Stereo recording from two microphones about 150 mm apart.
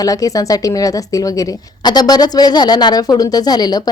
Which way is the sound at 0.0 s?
25° left (ahead or behind).